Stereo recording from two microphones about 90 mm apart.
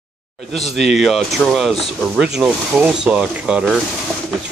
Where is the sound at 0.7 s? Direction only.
Centre (ahead or behind).